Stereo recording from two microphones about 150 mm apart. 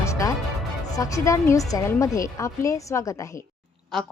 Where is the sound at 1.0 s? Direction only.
20° left (ahead or behind).